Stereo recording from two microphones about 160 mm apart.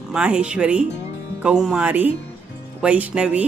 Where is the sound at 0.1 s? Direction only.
5° right (ahead or behind).